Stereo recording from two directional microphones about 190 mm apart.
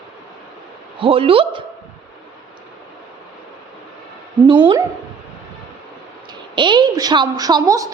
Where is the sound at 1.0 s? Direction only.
30° right (ahead or behind).